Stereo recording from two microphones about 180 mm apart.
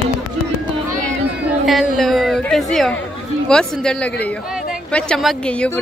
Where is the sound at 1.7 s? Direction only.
Centre (ahead or behind).